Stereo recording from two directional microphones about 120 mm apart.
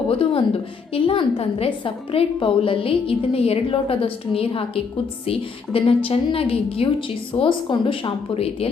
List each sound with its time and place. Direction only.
0.1 s a woman's voice: 50° left (ahead or behind)